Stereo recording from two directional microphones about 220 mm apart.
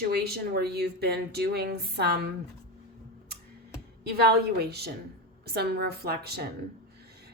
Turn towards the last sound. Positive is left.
turn(degrees=-45)  # may be behind; listen again after turning